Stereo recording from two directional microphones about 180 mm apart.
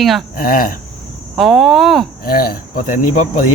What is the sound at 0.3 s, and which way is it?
Speech, 50° left (ahead or behind).